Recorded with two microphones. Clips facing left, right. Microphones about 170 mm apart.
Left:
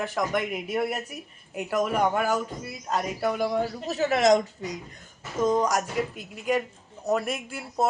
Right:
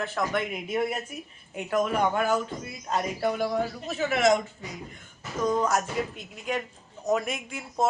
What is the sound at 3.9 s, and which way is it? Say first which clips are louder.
Speech: left 3 dB; 35° left (ahead or behind).